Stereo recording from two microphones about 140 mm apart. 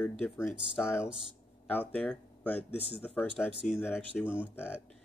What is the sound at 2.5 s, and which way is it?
Speech, 45° left (ahead or behind).